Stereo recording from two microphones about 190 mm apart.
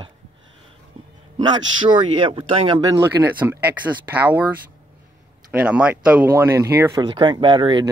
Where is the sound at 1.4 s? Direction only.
25° right (ahead or behind).